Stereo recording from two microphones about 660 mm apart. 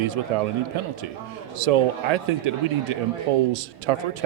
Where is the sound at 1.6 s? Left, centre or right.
Right.